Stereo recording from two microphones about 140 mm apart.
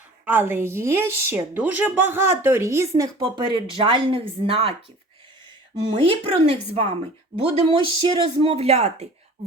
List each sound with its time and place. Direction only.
0.3 s a woman's voice: 15° right (ahead or behind)
3.2 s speech: 35° right (ahead or behind)
5.7 s speech: 35° right (ahead or behind)